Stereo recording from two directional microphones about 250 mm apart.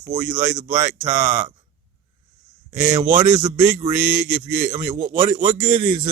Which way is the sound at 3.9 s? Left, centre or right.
Centre.